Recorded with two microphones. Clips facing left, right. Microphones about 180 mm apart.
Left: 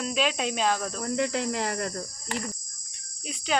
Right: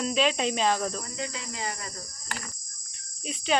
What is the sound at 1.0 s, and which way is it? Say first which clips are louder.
Cricket: left 9 dB; 65° left (ahead or behind).